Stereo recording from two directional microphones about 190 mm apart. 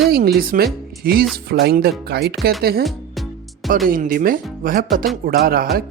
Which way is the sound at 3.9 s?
50° right (ahead or behind).